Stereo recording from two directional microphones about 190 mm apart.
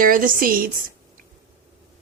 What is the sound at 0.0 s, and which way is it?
Speech, 45° right (ahead or behind).